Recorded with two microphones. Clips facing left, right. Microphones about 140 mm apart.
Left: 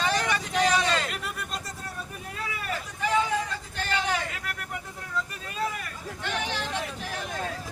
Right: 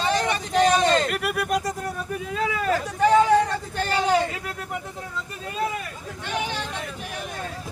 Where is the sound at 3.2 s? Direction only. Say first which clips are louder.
Right 10 dB; 65° right (ahead or behind).